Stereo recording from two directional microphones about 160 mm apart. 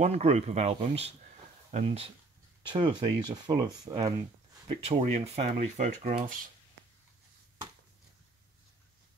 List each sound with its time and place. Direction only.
0.0 s speech: 40° right (ahead or behind)
2.7 s speech: 30° right (ahead or behind)
6.0 s speech: 60° right (ahead or behind)